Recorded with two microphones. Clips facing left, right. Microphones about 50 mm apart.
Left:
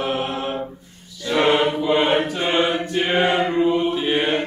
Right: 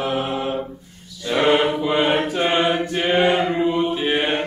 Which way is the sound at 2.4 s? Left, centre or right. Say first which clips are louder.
Right 1 dB; right.